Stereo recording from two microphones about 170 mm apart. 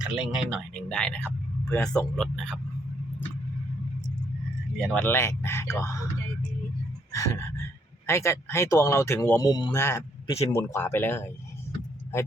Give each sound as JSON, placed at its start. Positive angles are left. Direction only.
{"t": 0.0, "sound": "a man's voice", "side_deg": -5}
{"t": 4.8, "sound": "speech", "side_deg": 5}
{"t": 7.1, "sound": "a sound", "side_deg": 20}
{"t": 8.0, "sound": "speech", "side_deg": 15}